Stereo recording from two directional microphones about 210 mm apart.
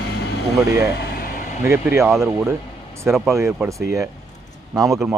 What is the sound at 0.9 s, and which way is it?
Air conditioning, 45° left (ahead or behind).